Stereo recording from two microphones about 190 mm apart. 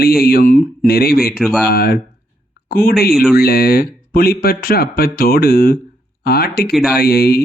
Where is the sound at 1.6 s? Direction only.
55° left (ahead or behind).